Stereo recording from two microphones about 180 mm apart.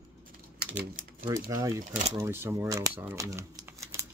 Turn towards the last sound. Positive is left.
turn(degrees=-15)  # may be behind; listen again after turning